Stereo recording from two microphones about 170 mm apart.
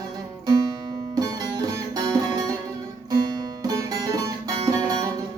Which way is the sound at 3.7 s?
20° right (ahead or behind).